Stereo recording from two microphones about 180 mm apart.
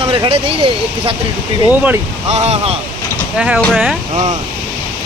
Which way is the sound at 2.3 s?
35° right (ahead or behind).